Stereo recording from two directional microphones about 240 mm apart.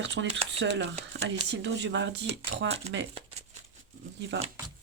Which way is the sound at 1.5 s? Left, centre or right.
Right.